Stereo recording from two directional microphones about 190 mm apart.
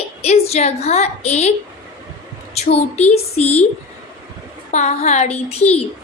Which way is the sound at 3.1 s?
35° left (ahead or behind).